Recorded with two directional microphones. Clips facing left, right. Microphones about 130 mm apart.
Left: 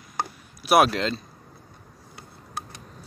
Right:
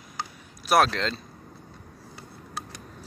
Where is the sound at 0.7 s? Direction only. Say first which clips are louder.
Left 3 dB; 10° left (ahead or behind).